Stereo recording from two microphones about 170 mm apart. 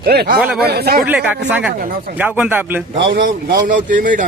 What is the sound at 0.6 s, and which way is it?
Speech, 65° right (ahead or behind).